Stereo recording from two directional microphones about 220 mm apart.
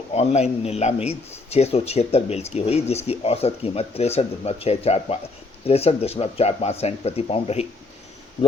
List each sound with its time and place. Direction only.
0.1 s speech: 30° left (ahead or behind)